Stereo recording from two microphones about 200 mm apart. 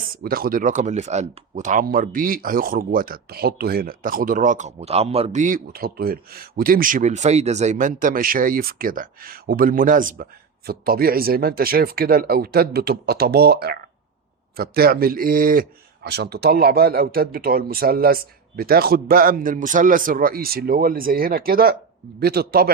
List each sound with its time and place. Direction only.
0.2 s speech: 50° right (ahead or behind)